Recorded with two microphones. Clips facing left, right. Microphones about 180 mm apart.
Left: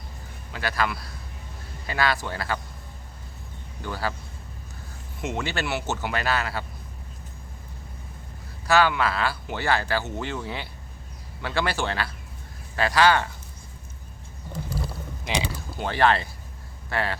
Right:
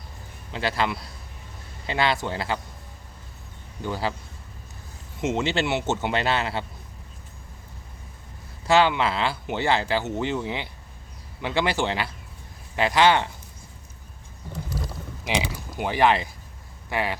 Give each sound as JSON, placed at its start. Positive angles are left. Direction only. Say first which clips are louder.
{"t": 0.5, "sound": "a man's voice", "louder": "right 2 dB", "side_deg": -25}
{"t": 3.8, "sound": "a man's voice", "louder": "right 2 dB", "side_deg": -20}
{"t": 5.2, "sound": "a man's voice", "louder": "right 5 dB", "side_deg": -20}
{"t": 8.6, "sound": "a man's voice", "louder": "right 1 dB", "side_deg": -25}
{"t": 15.4, "sound": "speech", "louder": "right 1 dB", "side_deg": -15}